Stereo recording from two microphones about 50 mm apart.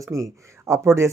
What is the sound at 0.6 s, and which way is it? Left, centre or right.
Speech, right.